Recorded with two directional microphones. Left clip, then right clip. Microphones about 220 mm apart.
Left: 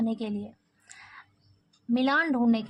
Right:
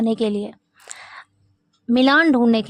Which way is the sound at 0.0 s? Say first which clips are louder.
Right 11 dB; 45° right (ahead or behind).